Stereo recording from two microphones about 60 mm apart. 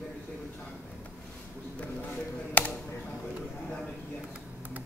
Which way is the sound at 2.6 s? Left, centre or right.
Left.